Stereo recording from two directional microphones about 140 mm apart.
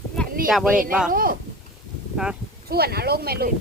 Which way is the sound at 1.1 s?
90° right.